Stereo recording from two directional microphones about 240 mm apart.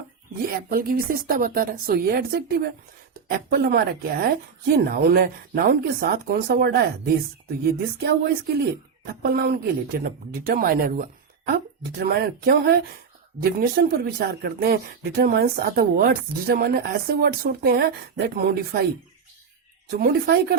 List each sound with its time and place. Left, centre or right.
0.4 s speech: right
20.0 s speech: right